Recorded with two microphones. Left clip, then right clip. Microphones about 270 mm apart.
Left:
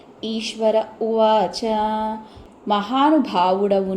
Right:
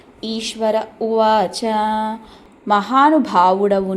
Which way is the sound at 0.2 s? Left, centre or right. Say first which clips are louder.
Right 1 dB; centre.